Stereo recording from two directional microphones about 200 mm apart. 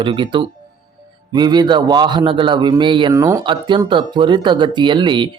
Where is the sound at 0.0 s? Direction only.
25° right (ahead or behind).